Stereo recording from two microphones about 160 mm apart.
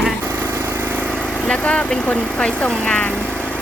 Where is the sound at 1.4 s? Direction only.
10° left (ahead or behind).